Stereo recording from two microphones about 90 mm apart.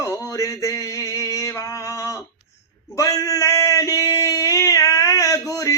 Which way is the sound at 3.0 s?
40° left (ahead or behind).